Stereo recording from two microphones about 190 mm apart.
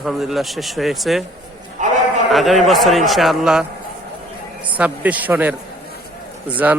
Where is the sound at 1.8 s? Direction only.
40° right (ahead or behind).